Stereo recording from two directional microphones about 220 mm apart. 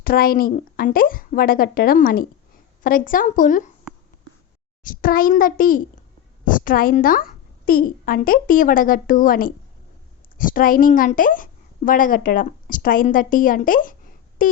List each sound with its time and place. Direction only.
0.0 s a woman's voice: 40° left (ahead or behind)
4.8 s a woman's voice: 40° left (ahead or behind)
14.4 s a sound: 40° left (ahead or behind)